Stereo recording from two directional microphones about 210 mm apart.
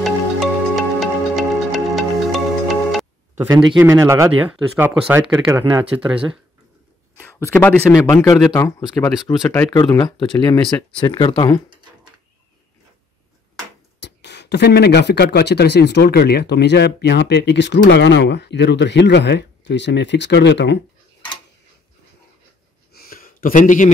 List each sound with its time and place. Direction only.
0.7 s music: centre (ahead or behind)
3.3 s a man's voice: 20° right (ahead or behind)
7.2 s speech: 10° left (ahead or behind)
13.9 s speech: 55° left (ahead or behind)
22.9 s a sound: 45° left (ahead or behind)